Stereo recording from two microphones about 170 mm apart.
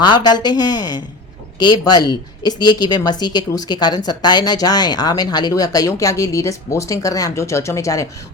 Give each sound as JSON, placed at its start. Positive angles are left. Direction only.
{"t": 0.0, "sound": "speech", "side_deg": 25}